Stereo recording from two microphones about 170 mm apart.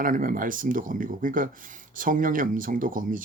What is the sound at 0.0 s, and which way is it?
Speech, 50° right (ahead or behind).